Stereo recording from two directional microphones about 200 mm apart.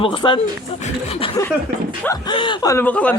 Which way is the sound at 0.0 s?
25° left (ahead or behind).